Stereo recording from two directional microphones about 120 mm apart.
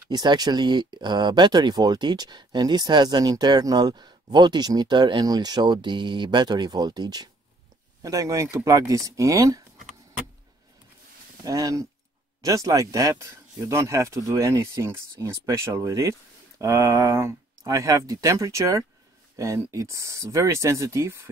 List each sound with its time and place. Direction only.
0.1 s speech: 35° right (ahead or behind)
11.4 s speech: 30° right (ahead or behind)